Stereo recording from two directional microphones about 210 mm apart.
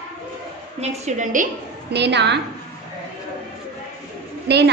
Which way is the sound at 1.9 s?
55° right (ahead or behind).